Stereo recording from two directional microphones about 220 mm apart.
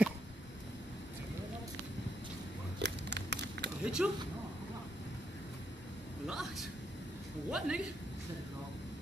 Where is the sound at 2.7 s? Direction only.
50° right (ahead or behind).